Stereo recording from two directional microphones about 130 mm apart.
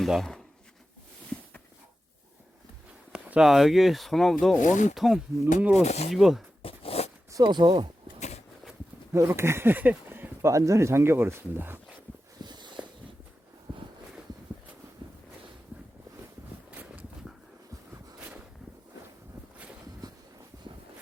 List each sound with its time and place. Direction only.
0.0 s speech: centre (ahead or behind)
3.1 s speech: 10° right (ahead or behind)
4.6 s speech: 70° left (ahead or behind)
4.9 s speech: centre (ahead or behind)
5.8 s speech: 60° left (ahead or behind)
6.1 s speech: centre (ahead or behind)
6.6 s zipper: 45° left (ahead or behind)
7.3 s speech: 35° right (ahead or behind)
9.1 s speech: 20° right (ahead or behind)
12.4 s a sound: 35° right (ahead or behind)
16.7 s walk: 10° right (ahead or behind)